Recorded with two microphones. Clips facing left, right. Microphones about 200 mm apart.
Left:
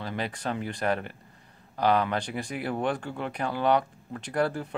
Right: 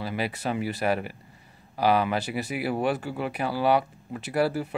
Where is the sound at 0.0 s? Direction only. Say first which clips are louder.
Right 3 dB; 10° right (ahead or behind).